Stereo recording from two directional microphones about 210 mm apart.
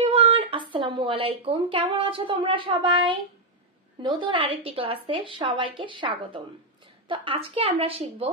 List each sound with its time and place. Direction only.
0.0 s a woman's voice: 30° right (ahead or behind)